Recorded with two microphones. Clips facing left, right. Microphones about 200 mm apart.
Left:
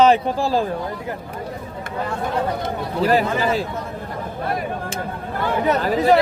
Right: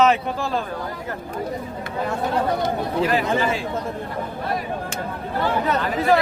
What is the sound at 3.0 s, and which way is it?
Speech, 40° left (ahead or behind).